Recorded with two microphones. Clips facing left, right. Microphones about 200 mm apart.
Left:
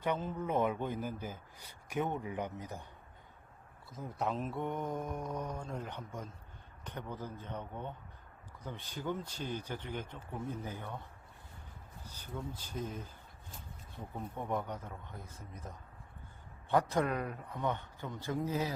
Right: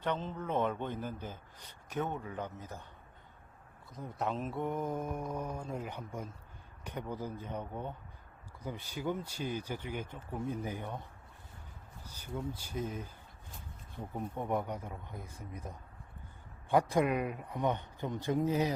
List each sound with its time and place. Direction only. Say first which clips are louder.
0.0 s a man's voice: left 1 dB; 10° left (ahead or behind)
3.9 s mantra: even; centre (ahead or behind)
6.8 s speech: right 3 dB; 10° right (ahead or behind)
12.0 s speech: right 3 dB; 10° right (ahead or behind)